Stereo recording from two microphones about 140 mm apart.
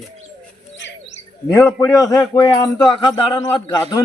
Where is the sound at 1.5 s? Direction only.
20° left (ahead or behind).